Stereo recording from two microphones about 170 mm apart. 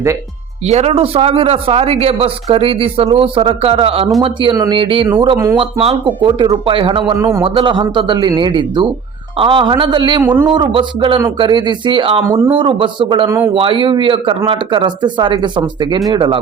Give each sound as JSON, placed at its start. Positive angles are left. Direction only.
{"t": 0.7, "sound": "speech", "side_deg": -40}
{"t": 7.2, "sound": "speech", "side_deg": -20}
{"t": 7.4, "sound": "speech", "side_deg": -30}